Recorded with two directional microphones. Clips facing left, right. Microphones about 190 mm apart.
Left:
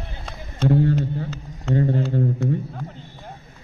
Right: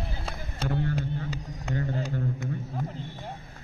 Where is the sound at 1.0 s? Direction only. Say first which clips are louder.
Left 5 dB; 10° right (ahead or behind).